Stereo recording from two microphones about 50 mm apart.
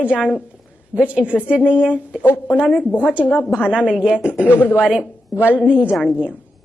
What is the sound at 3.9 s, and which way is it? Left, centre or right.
Speech, centre.